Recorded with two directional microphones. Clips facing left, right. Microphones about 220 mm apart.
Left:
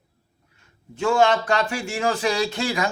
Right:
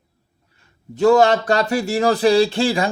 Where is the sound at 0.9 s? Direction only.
40° right (ahead or behind).